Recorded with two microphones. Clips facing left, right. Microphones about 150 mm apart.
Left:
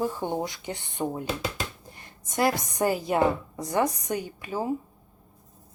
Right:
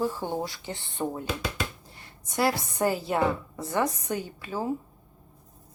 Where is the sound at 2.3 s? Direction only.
20° left (ahead or behind).